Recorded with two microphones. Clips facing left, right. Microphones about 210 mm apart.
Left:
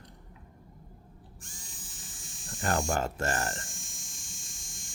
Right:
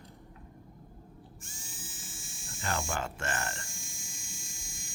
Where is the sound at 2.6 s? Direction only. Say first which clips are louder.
Left 5 dB; 40° left (ahead or behind).